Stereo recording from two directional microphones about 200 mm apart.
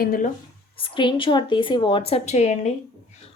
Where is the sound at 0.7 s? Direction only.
25° left (ahead or behind).